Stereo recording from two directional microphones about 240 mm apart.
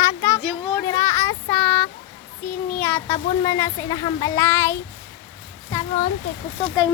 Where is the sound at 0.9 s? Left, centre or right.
Centre.